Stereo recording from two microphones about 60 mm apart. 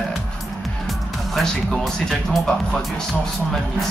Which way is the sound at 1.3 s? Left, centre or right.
Centre.